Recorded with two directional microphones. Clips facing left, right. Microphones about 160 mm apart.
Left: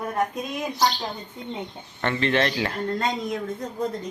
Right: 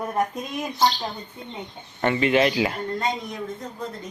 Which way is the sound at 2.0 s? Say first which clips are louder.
Right 3 dB; 10° right (ahead or behind).